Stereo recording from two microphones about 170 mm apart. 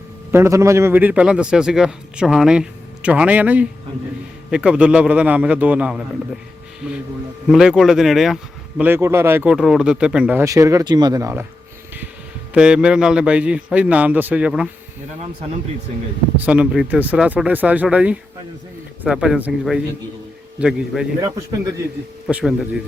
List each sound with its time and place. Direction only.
0.3 s a man's voice: 15° right (ahead or behind)
8.8 s a man's voice: 15° right (ahead or behind)
10.4 s speech: 20° right (ahead or behind)
12.5 s a man's voice: 5° right (ahead or behind)
16.5 s a man's voice: 5° right (ahead or behind)
22.3 s a man's voice: 5° right (ahead or behind)